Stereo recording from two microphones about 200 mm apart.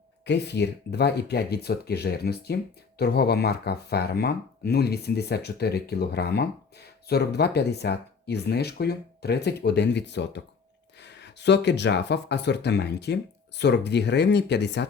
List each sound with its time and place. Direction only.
0.3 s speech: 60° left (ahead or behind)